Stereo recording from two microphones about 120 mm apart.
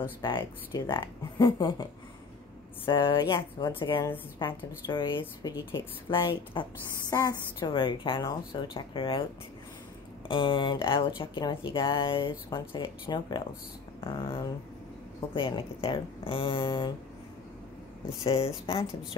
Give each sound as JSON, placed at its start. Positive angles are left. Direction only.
{"t": 0.2, "sound": "speech", "side_deg": 40}
{"t": 2.9, "sound": "speech", "side_deg": 40}
{"t": 10.2, "sound": "speech", "side_deg": 45}
{"t": 18.2, "sound": "speech", "side_deg": 50}